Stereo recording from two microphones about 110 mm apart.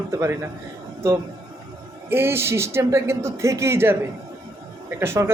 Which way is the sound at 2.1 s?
20° right (ahead or behind).